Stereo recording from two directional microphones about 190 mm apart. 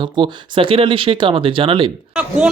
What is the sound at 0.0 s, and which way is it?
Speech, 25° right (ahead or behind).